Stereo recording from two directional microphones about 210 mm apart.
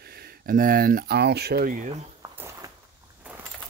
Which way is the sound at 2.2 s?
15° right (ahead or behind).